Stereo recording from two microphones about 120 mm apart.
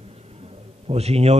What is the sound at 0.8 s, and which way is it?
Speech, 60° right (ahead or behind).